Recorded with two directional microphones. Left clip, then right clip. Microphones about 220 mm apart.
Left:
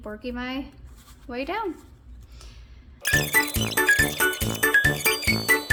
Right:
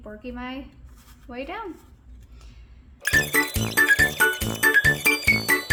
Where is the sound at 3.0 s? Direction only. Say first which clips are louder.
Right 1 dB; centre (ahead or behind).